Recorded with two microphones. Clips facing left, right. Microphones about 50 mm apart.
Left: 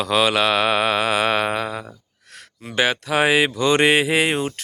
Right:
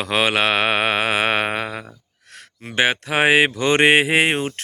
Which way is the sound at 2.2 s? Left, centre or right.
Right.